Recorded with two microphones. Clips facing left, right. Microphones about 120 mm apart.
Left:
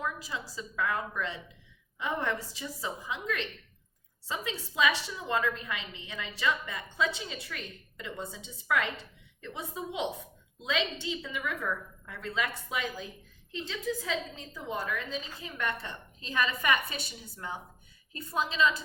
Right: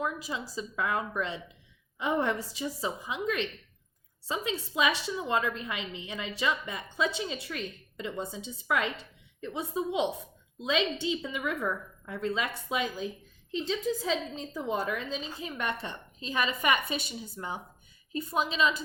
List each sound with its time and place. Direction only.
0.0 s a woman's voice: 20° right (ahead or behind)